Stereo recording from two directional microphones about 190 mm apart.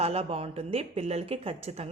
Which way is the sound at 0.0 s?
30° right (ahead or behind).